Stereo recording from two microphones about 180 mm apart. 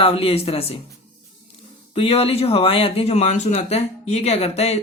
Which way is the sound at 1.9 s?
30° left (ahead or behind).